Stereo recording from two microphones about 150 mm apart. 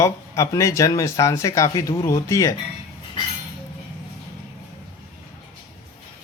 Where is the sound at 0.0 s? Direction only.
20° left (ahead or behind).